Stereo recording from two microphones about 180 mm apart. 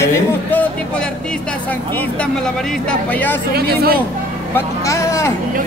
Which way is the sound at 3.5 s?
60° right (ahead or behind).